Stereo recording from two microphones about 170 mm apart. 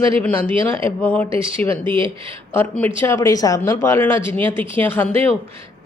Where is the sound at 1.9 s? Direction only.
30° right (ahead or behind).